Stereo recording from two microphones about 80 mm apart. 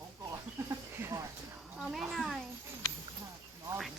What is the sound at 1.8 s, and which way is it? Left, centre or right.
Speech, centre.